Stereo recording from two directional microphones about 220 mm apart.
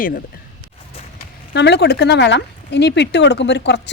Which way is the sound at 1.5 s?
50° left (ahead or behind).